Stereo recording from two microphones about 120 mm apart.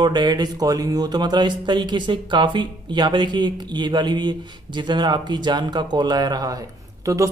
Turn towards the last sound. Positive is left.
turn(degrees=-25)  # may be behind; listen again after turning